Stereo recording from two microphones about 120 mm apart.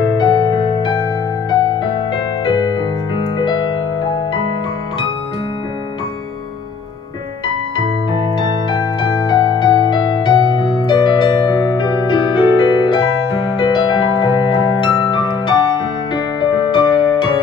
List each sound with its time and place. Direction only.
0.1 s music: 35° left (ahead or behind)
7.4 s music: 40° left (ahead or behind)